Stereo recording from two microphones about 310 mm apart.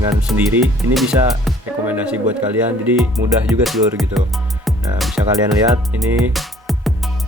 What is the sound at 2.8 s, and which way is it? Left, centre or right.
Music, centre.